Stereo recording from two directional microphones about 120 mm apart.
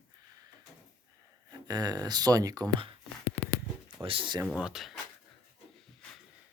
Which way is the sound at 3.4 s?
60° left (ahead or behind).